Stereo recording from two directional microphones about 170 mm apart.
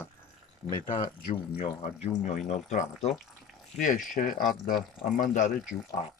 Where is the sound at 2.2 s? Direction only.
45° left (ahead or behind).